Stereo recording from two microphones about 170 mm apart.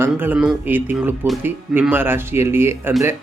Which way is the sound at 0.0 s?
10° right (ahead or behind).